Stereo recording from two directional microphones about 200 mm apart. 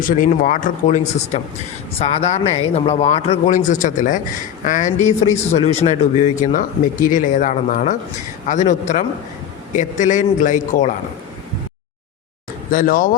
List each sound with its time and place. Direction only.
0.0 s speech: 40° left (ahead or behind)
12.7 s speech: 45° left (ahead or behind)